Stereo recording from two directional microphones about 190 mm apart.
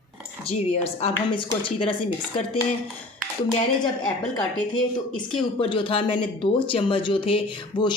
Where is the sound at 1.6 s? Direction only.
25° left (ahead or behind).